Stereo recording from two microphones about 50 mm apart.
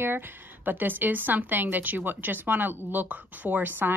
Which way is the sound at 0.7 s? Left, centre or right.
Right.